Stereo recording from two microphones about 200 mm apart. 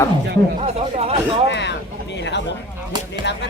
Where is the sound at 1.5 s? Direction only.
60° left (ahead or behind).